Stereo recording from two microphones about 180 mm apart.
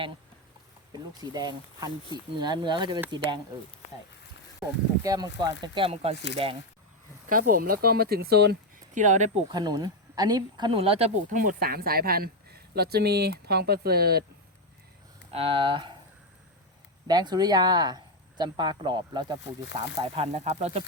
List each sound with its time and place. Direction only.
0.9 s speech: 20° right (ahead or behind)
5.0 s speech: 20° right (ahead or behind)
7.3 s speech: 50° right (ahead or behind)
9.0 s speech: 40° right (ahead or behind)
9.5 s speech: 25° right (ahead or behind)
11.3 s speech: 55° right (ahead or behind)
15.3 s speech: 30° right (ahead or behind)
17.1 s speech: 25° right (ahead or behind)